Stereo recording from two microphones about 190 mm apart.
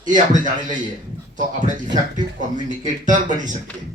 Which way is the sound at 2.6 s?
40° right (ahead or behind).